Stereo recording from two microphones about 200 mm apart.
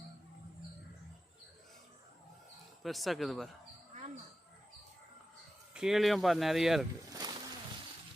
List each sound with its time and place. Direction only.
2.8 s speech: centre (ahead or behind)
5.7 s speech: centre (ahead or behind)
7.1 s a sound: 20° right (ahead or behind)